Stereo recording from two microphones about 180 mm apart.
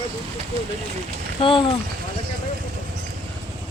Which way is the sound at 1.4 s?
30° left (ahead or behind).